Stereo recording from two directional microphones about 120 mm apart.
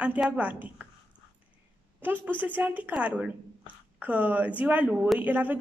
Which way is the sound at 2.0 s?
15° right (ahead or behind).